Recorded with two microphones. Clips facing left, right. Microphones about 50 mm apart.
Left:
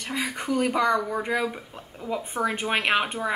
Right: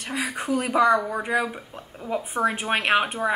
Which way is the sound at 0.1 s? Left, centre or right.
Centre.